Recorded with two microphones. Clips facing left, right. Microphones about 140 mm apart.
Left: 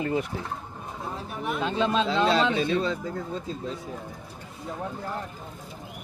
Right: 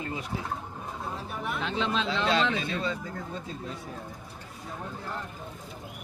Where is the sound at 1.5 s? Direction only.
15° left (ahead or behind).